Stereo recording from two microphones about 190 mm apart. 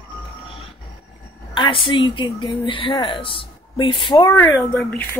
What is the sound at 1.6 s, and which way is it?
Speech, 25° left (ahead or behind).